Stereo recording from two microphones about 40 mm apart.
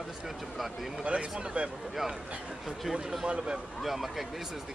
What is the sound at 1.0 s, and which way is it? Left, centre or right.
Speech, right.